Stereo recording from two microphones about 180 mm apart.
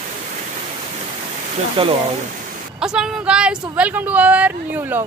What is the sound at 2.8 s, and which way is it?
Speech, 5° right (ahead or behind).